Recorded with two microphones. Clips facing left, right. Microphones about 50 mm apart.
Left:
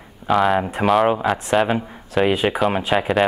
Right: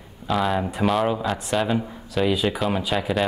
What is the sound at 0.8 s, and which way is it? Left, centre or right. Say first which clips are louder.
Speech: left 4 dB; left.